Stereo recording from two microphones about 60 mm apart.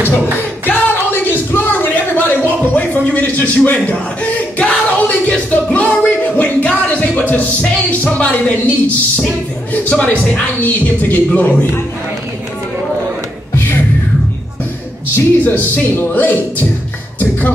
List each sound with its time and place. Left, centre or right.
0.4 s a sound: left
5.5 s music: left
7.9 s speech: left
13.6 s music: left
15.4 s speech: left